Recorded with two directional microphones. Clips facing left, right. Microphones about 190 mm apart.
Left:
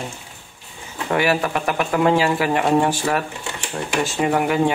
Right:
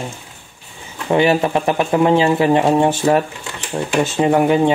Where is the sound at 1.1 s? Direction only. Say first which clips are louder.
Right 5 dB; 25° right (ahead or behind).